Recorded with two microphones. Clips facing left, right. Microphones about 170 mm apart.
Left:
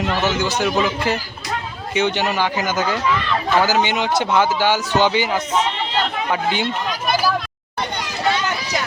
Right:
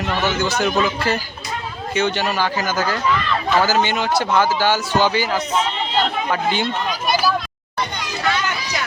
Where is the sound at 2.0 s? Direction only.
15° left (ahead or behind).